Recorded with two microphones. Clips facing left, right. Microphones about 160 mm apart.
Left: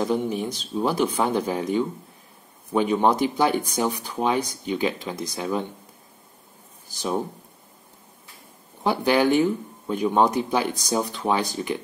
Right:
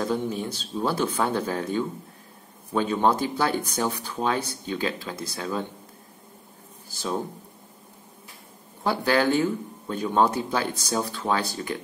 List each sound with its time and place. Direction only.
0.0 s speech: 15° left (ahead or behind)
6.9 s speech: 15° left (ahead or behind)
8.8 s speech: 15° left (ahead or behind)